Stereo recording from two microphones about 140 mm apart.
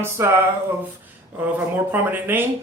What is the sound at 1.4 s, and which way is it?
Speech, 15° right (ahead or behind).